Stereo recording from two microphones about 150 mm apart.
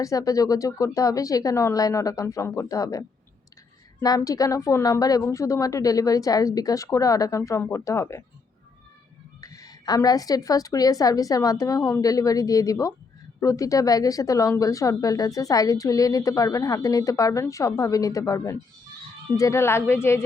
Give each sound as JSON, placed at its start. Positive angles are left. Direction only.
{"t": 0.0, "sound": "a woman's voice", "side_deg": 25}
{"t": 4.0, "sound": "a woman's voice", "side_deg": 25}
{"t": 9.4, "sound": "a woman's voice", "side_deg": 25}